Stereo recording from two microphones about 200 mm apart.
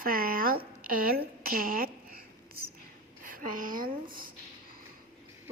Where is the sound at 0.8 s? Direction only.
45° right (ahead or behind).